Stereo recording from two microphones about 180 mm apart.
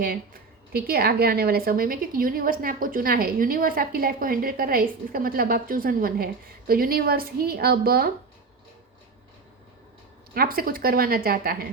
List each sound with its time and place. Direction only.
0.7 s a woman's voice: 60° right (ahead or behind)
10.3 s a woman's voice: 55° right (ahead or behind)